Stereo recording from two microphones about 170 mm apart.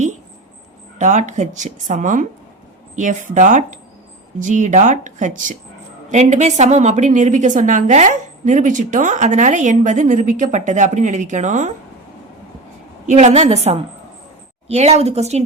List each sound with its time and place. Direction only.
0.9 s a woman's voice: 45° right (ahead or behind)
13.1 s a woman's voice: 40° right (ahead or behind)